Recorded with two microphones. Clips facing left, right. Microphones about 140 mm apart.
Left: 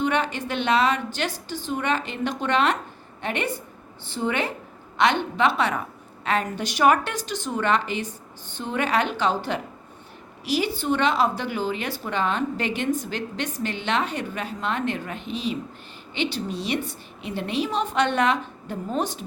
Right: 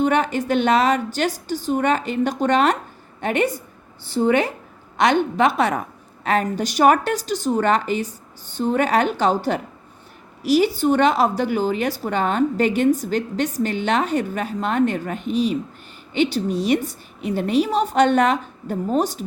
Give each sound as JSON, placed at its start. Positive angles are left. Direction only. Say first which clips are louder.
{"t": 0.0, "sound": "a woman's voice", "louder": "right 5 dB", "side_deg": -45}